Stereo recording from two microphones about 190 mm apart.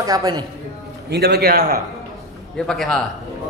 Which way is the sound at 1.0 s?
60° right (ahead or behind).